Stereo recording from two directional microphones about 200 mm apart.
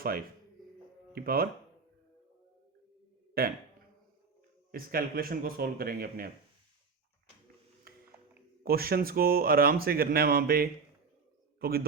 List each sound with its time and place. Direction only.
0.0 s speech: 50° right (ahead or behind)
3.4 s speech: 50° right (ahead or behind)
4.7 s speech: 45° right (ahead or behind)
7.9 s a sound: 50° right (ahead or behind)
8.6 s speech: 50° right (ahead or behind)